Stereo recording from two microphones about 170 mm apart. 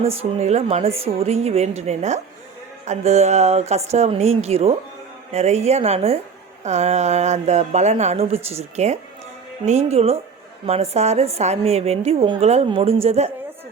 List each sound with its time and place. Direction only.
0.2 s a woman's voice: 40° right (ahead or behind)